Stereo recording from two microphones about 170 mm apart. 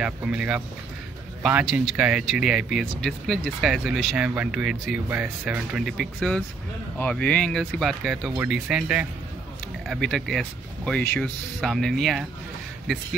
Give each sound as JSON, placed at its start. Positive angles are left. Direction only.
{"t": 0.0, "sound": "speech", "side_deg": -5}